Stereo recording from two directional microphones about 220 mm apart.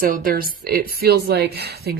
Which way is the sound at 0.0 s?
40° right (ahead or behind).